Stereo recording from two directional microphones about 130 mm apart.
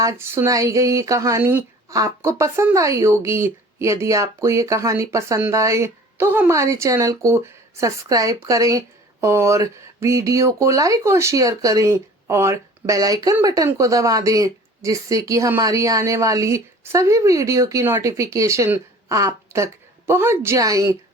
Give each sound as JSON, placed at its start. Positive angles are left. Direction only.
{"t": 0.0, "sound": "a woman's voice", "side_deg": -20}